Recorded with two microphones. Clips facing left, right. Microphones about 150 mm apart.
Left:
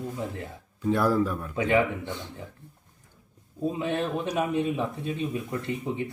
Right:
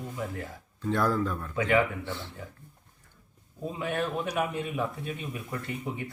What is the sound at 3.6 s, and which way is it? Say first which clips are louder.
Speech: left 3 dB; 25° left (ahead or behind).